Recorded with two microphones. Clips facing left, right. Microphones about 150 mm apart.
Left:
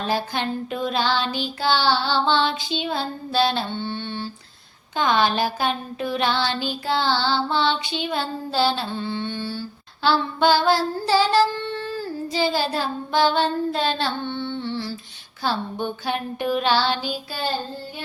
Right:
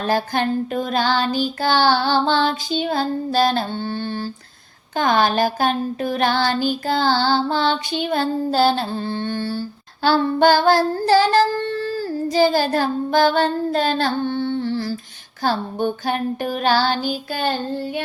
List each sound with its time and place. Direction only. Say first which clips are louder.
0.0 s child singing: right 4 dB; 45° right (ahead or behind)